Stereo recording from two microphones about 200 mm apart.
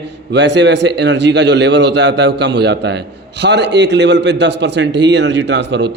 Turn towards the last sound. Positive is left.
turn(degrees=-60)  # may be behind; listen again after turning